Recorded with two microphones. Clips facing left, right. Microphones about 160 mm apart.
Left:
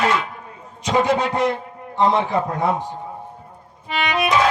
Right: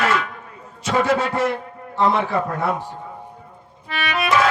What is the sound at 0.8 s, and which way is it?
A man's voice, 15° left (ahead or behind).